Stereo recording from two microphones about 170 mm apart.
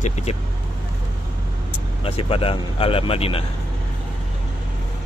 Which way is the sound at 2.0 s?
35° left (ahead or behind).